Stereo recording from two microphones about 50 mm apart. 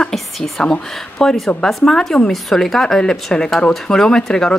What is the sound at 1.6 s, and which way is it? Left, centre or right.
Speech, centre.